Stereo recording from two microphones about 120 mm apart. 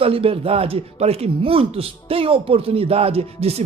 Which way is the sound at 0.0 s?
50° right (ahead or behind).